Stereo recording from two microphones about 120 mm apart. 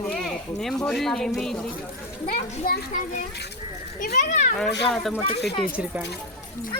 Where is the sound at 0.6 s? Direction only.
5° left (ahead or behind).